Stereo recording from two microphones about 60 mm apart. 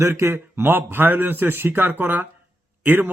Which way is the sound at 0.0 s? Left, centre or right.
Right.